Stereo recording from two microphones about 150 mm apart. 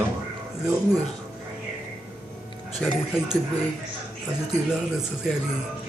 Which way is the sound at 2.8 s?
5° left (ahead or behind).